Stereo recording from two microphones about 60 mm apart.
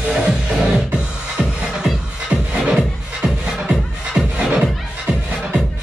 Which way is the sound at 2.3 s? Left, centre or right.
Centre.